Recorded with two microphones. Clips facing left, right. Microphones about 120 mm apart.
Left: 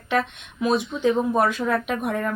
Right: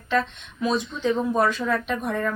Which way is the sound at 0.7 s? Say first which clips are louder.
Left 4 dB; 55° left (ahead or behind).